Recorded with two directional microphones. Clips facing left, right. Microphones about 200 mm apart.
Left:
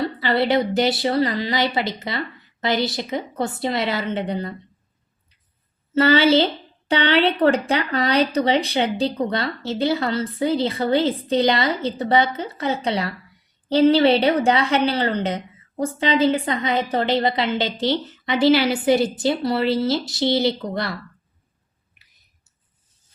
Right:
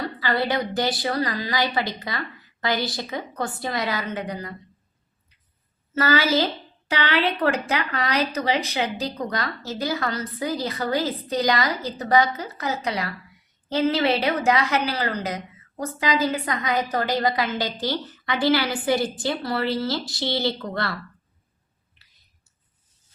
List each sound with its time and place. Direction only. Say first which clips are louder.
0.0 s a woman's voice: left 4 dB; 25° left (ahead or behind)
5.9 s a woman's voice: left 6 dB; 25° left (ahead or behind)